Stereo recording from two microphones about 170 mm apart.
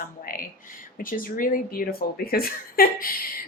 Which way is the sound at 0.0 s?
55° left (ahead or behind).